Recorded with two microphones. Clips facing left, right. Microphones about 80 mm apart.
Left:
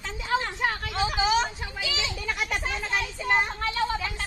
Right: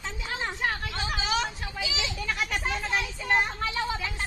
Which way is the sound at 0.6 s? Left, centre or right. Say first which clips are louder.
Left 2 dB; centre.